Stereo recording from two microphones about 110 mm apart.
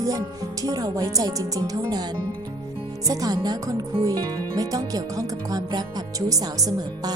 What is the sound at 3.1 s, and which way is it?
Speech, 35° right (ahead or behind).